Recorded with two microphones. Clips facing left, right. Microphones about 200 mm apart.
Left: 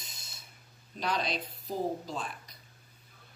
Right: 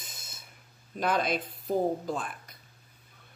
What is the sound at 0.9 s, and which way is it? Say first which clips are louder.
Speech: right 5 dB; 50° right (ahead or behind).